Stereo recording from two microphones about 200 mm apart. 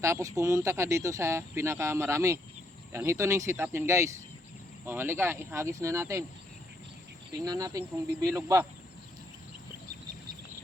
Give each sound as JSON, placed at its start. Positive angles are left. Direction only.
{"t": 0.0, "sound": "speech", "side_deg": -15}
{"t": 7.4, "sound": "speech", "side_deg": -15}